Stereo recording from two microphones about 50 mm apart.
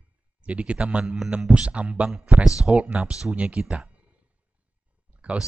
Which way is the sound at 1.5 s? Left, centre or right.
Right.